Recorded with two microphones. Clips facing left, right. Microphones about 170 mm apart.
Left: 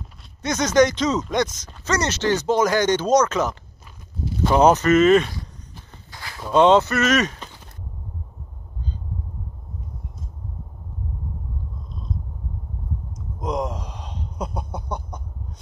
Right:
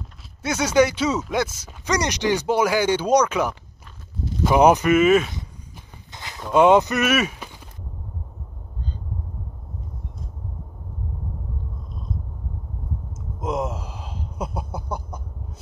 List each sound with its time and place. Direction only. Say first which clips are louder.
0.4 s speech: left 1 dB; 10° right (ahead or behind)
6.1 s a sound: even; 20° right (ahead or behind)
6.5 s speech: even; 10° right (ahead or behind)
13.4 s gasp: even; 5° right (ahead or behind)